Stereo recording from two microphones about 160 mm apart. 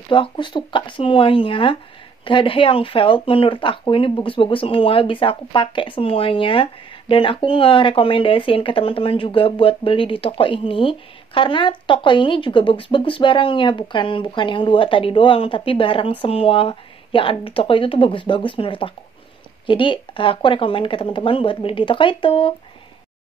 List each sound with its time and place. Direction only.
0.1 s speech: 30° left (ahead or behind)